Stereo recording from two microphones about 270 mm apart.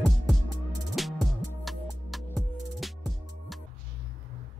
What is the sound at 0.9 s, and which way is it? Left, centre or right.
Music, centre.